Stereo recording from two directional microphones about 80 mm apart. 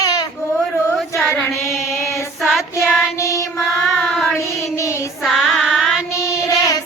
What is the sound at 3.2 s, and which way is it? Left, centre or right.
Mantra, left.